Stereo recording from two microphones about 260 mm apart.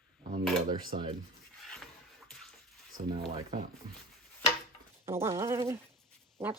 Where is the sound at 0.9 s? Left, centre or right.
Right.